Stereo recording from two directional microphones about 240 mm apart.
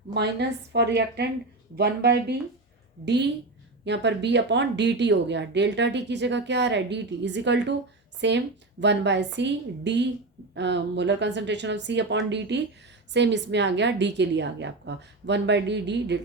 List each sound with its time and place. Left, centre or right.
0.1 s speech: right
3.8 s speech: right